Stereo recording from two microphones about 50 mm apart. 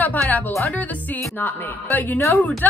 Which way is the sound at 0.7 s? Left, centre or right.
Left.